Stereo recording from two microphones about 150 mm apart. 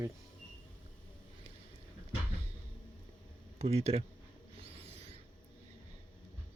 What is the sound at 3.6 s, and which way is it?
Speech, 45° right (ahead or behind).